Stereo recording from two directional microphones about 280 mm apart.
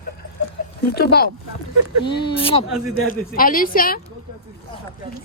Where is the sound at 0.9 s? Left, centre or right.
Left.